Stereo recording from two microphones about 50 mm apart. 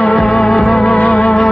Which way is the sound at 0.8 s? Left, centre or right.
Left.